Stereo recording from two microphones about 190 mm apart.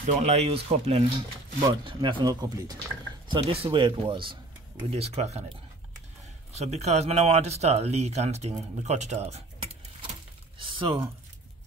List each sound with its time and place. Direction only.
0.0 s speech: 35° right (ahead or behind)
1.6 s speech: 20° right (ahead or behind)
6.5 s speech: 35° right (ahead or behind)
10.6 s a sound: 25° right (ahead or behind)